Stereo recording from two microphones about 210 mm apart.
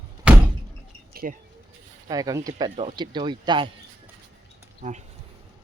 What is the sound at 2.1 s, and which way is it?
Speech, 15° right (ahead or behind).